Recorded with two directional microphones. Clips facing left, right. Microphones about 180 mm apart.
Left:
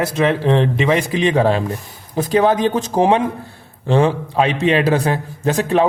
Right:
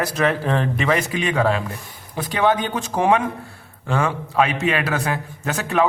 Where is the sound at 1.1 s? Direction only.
30° left (ahead or behind).